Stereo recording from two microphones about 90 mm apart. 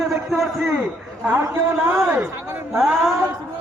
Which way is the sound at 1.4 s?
30° right (ahead or behind).